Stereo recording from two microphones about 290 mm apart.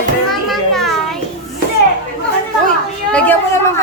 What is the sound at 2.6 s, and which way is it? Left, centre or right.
Children playing, centre.